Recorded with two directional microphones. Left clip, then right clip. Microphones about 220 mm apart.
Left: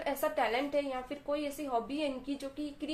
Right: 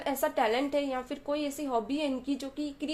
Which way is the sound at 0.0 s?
35° right (ahead or behind).